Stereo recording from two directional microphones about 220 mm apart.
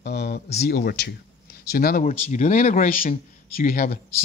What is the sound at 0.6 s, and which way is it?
Speech, 45° left (ahead or behind).